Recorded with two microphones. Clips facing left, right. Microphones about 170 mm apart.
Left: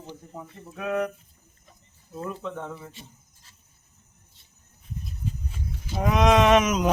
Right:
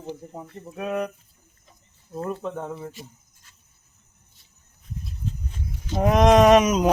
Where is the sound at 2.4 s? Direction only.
40° right (ahead or behind).